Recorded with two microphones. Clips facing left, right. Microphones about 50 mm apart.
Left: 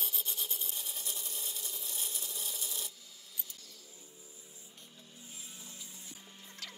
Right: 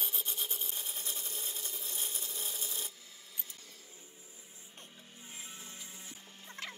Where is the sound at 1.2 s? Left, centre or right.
Right.